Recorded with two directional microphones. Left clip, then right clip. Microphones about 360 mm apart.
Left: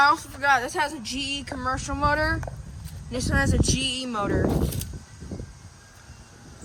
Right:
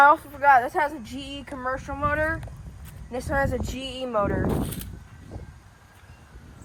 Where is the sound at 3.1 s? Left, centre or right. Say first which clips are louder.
Even; centre.